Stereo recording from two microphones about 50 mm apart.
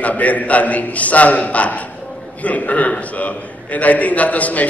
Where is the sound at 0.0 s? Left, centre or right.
Left.